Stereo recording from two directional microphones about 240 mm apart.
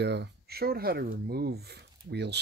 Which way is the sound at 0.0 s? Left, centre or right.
Right.